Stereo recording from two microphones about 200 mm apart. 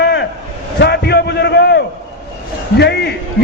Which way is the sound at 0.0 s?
55° left (ahead or behind).